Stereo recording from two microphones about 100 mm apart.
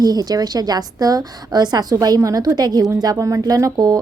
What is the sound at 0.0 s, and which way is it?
Speech, 40° right (ahead or behind).